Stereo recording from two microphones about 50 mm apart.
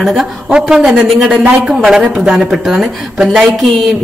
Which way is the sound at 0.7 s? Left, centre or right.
Centre.